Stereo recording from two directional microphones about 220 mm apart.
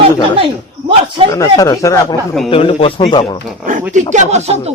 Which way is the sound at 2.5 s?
25° left (ahead or behind).